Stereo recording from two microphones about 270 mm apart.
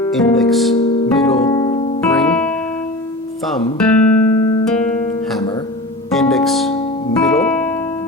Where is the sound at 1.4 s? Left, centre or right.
Centre.